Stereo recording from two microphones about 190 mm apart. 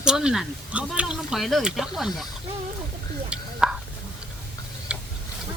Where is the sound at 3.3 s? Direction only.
5° right (ahead or behind).